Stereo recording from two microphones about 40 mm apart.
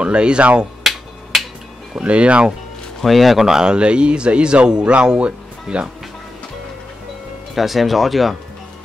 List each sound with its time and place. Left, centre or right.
0.0 s speech: right
0.8 s hammer: centre
1.3 s finger snapping: centre
2.0 s speech: right
3.1 s speech: centre
3.4 s speech: centre
5.2 s music: right
7.5 s speech: centre